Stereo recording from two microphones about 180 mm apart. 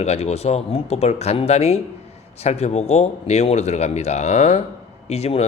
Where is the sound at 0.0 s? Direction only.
35° left (ahead or behind).